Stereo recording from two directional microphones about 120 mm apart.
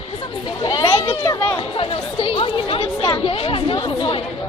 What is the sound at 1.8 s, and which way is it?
Speech, 50° left (ahead or behind).